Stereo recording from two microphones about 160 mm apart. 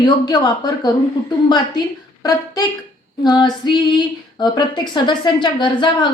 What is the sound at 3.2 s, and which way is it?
Speech, 25° left (ahead or behind).